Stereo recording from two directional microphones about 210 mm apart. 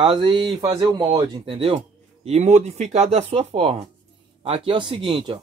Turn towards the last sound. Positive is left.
turn(degrees=-20)  # may be behind; listen again after turning